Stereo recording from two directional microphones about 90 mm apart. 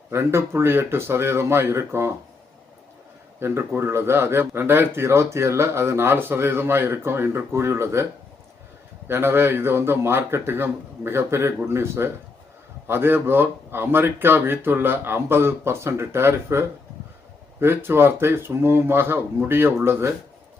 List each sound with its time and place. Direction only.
0.1 s speech: 30° right (ahead or behind)
3.8 s speech: 30° right (ahead or behind)
9.0 s speech: 25° right (ahead or behind)